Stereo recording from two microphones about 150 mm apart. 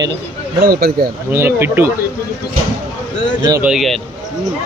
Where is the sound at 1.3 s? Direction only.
15° right (ahead or behind).